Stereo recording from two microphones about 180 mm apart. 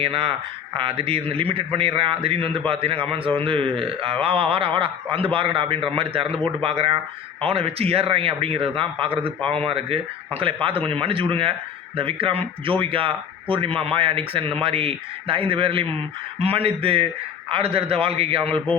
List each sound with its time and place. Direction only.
0.0 s a man's voice: 30° right (ahead or behind)
18.5 s speech: 10° left (ahead or behind)